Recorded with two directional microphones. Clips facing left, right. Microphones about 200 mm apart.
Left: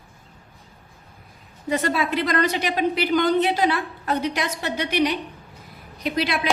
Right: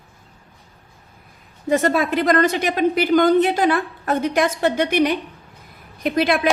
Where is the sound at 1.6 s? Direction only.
45° right (ahead or behind).